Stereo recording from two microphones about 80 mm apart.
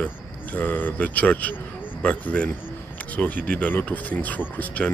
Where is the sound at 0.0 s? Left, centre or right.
Left.